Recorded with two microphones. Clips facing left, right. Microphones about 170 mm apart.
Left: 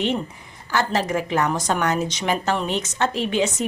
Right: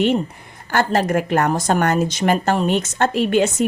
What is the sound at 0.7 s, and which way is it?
A woman's voice, 55° right (ahead or behind).